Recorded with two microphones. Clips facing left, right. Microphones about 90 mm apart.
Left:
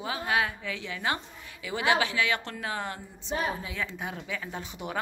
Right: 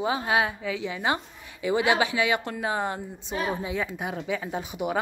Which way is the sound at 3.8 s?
10° right (ahead or behind).